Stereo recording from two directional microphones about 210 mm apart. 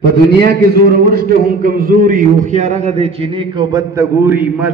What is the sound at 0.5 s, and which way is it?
A man's voice, 45° right (ahead or behind).